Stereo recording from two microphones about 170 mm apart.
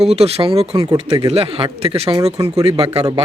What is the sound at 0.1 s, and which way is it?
Speech, 35° right (ahead or behind).